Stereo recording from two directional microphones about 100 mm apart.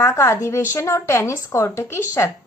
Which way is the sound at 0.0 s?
30° left (ahead or behind).